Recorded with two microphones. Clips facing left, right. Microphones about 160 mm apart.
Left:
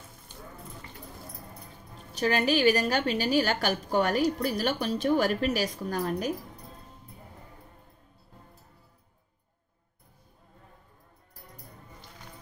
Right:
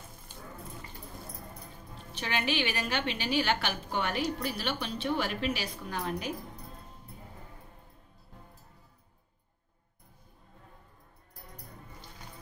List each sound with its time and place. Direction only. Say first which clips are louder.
2.1 s a woman's voice: left 7 dB; 40° left (ahead or behind)